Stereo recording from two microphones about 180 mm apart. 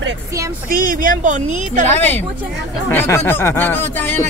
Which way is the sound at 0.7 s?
50° right (ahead or behind).